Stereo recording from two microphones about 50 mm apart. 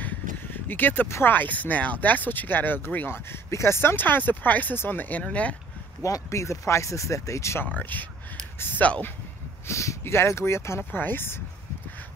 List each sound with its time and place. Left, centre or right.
0.7 s speech: left
3.1 s speech: left
3.9 s speech: left
5.3 s speech: left
6.0 s speech: left
7.7 s speech: left
9.7 s speech: left
10.9 s speech: left